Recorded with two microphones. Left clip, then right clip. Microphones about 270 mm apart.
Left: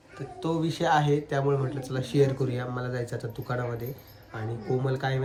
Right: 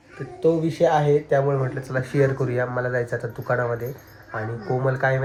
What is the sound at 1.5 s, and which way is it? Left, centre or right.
Speech, centre.